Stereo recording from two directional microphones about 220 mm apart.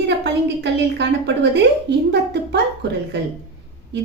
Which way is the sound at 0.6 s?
50° right (ahead or behind).